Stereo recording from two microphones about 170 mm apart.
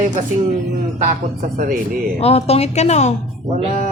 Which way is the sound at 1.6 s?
55° right (ahead or behind).